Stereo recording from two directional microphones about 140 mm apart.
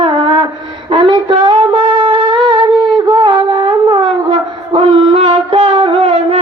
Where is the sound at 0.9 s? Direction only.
35° right (ahead or behind).